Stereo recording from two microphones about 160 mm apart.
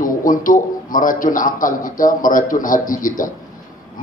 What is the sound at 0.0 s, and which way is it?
A man's voice, 55° left (ahead or behind).